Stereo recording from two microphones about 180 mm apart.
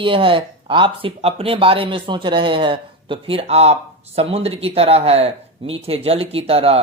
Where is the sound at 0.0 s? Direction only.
30° right (ahead or behind).